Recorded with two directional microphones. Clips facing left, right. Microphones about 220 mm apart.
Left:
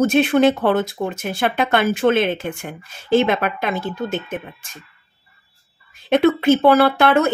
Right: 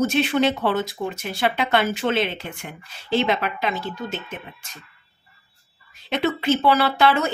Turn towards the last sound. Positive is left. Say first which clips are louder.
# left 5 dB
turn(degrees=55)  # may be behind; listen again after turning